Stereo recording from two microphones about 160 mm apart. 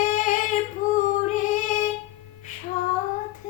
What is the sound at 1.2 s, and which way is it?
Female singing, 55° left (ahead or behind).